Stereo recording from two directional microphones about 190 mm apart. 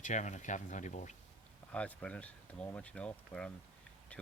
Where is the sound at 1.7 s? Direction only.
5° left (ahead or behind).